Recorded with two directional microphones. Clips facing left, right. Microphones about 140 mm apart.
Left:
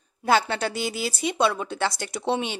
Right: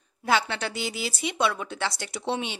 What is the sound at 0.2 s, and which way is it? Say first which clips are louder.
A woman's voice: left 3 dB; 40° left (ahead or behind).